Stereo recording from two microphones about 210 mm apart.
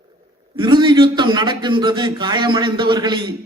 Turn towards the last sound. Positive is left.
turn(degrees=-20)  # may be behind; listen again after turning